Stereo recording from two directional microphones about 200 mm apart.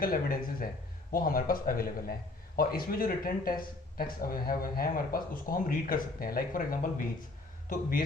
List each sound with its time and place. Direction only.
0.0 s speech: 45° left (ahead or behind)